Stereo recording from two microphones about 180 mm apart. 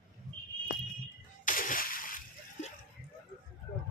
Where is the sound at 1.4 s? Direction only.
50° left (ahead or behind).